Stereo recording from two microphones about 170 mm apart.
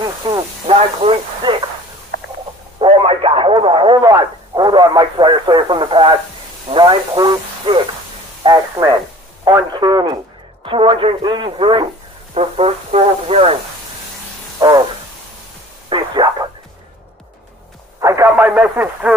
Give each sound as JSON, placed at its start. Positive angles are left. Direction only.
{"t": 0.0, "sound": "radio", "side_deg": -30}
{"t": 2.8, "sound": "radio", "side_deg": -30}
{"t": 10.6, "sound": "speech", "side_deg": -30}
{"t": 14.6, "sound": "a sound", "side_deg": -25}
{"t": 15.9, "sound": "radio", "side_deg": -25}
{"t": 18.0, "sound": "speech", "side_deg": -15}